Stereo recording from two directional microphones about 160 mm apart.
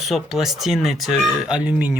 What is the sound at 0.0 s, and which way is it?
Speech, centre (ahead or behind).